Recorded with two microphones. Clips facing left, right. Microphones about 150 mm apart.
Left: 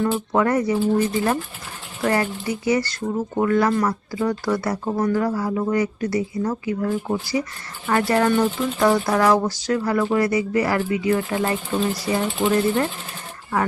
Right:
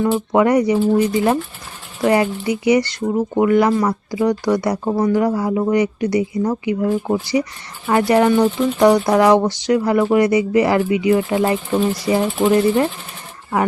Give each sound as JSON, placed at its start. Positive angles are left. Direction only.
{"t": 0.0, "sound": "a woman's voice", "side_deg": -15}